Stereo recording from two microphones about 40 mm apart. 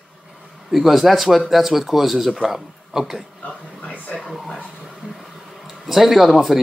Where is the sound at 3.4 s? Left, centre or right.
Left.